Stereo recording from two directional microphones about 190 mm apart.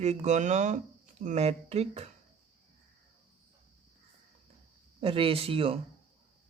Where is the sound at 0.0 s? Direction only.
35° right (ahead or behind).